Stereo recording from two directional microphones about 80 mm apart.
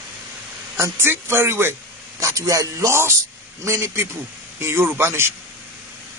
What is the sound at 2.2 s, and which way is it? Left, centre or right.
A man's voice, right.